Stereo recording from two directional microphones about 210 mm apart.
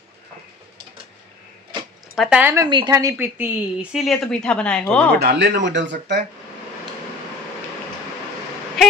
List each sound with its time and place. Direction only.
2.1 s a woman's voice: 5° right (ahead or behind)
5.1 s speech: 55° right (ahead or behind)